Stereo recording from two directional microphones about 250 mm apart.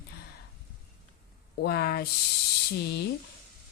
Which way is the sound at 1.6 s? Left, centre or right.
Left.